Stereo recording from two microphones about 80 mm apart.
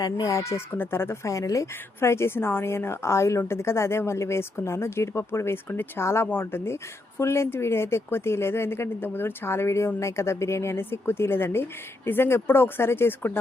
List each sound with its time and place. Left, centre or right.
0.0 s speech: left